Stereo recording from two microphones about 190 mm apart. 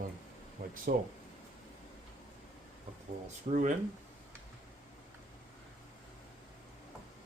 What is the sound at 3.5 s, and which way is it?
Speech, 40° right (ahead or behind).